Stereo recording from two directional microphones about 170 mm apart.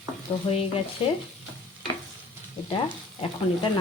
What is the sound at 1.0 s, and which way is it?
Stir, 30° left (ahead or behind).